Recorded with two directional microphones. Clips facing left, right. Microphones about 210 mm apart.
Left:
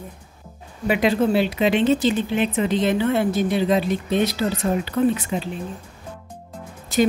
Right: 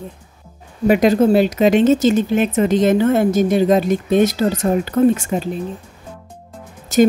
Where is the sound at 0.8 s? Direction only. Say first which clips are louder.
Right 6 dB; 40° right (ahead or behind).